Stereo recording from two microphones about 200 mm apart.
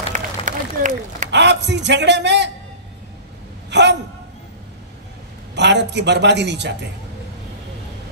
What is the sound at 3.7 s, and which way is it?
Speech, 60° right (ahead or behind).